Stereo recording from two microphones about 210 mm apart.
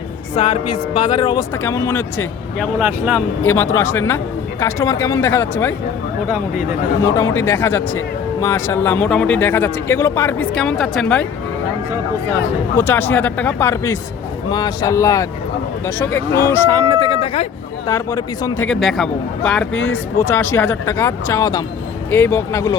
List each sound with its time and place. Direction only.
0.3 s speech: 25° left (ahead or behind)
2.7 s speech: 5° right (ahead or behind)
3.4 s speech: 10° left (ahead or behind)
7.2 s speech: 10° left (ahead or behind)
12.7 s speech: 10° left (ahead or behind)
16.9 s a sound: 20° left (ahead or behind)
17.8 s a man's voice: 15° left (ahead or behind)